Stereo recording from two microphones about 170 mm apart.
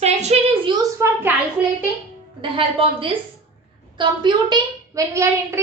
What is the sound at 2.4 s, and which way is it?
A woman's voice, 30° right (ahead or behind).